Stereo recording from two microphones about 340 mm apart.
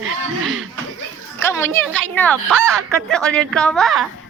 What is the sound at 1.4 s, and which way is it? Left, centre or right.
A woman's voice, centre.